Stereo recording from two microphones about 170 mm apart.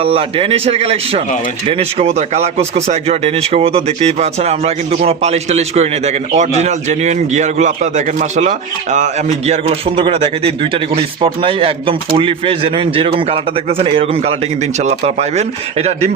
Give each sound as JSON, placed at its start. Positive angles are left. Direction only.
{"t": 0.0, "sound": "speech", "side_deg": -35}